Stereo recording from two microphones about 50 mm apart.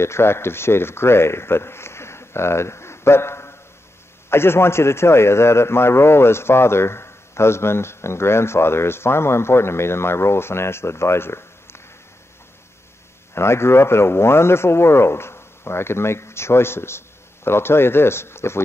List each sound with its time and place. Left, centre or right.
0.0 s a man's voice: left
13.3 s a man's voice: left